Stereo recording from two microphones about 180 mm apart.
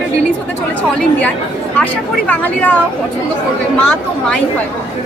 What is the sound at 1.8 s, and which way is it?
Speech, 10° left (ahead or behind).